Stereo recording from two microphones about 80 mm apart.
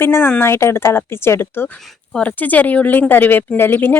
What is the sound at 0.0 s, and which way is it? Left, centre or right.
Speech, left.